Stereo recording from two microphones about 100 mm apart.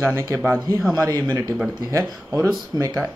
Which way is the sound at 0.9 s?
35° right (ahead or behind).